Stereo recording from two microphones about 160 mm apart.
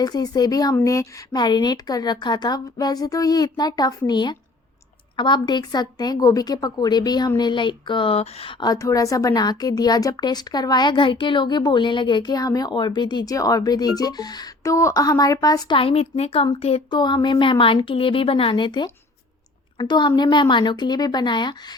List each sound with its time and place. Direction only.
0.0 s a woman's voice: 25° left (ahead or behind)
8.6 s a woman's voice: 20° left (ahead or behind)
15.8 s a woman's voice: 40° left (ahead or behind)